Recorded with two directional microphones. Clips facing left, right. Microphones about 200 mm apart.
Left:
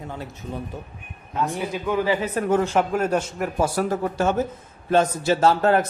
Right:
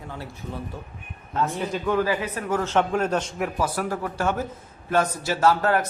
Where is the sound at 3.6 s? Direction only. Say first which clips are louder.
Left 6 dB; 25° left (ahead or behind).